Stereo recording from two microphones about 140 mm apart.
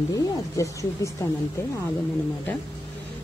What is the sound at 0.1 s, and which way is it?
Speech, 20° left (ahead or behind).